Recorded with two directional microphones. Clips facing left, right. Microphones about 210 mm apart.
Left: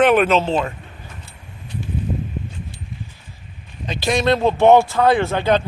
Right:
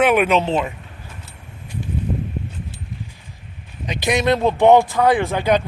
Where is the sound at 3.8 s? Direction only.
20° right (ahead or behind).